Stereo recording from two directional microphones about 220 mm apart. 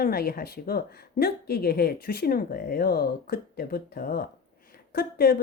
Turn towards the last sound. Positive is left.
turn(degrees=45)  # may be behind; listen again after turning